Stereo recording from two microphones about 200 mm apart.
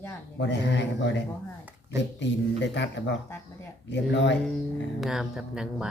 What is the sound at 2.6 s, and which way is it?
A man's voice, 60° left (ahead or behind).